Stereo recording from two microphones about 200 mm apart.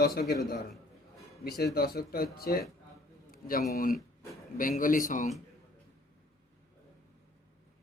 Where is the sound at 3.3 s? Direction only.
45° left (ahead or behind).